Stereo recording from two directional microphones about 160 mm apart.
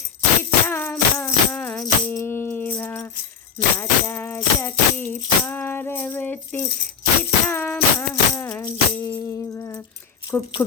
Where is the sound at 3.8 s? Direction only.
15° left (ahead or behind).